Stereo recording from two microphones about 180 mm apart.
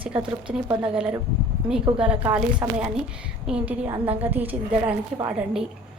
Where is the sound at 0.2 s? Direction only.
30° right (ahead or behind).